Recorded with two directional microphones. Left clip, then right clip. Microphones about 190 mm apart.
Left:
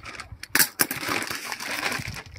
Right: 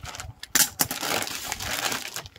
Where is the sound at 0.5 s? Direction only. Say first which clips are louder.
Left 1 dB; 10° right (ahead or behind).